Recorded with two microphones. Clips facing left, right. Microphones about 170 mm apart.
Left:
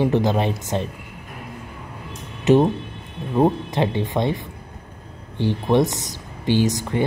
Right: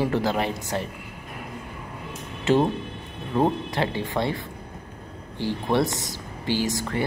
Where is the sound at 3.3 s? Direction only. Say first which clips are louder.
Left 4 dB; 15° left (ahead or behind).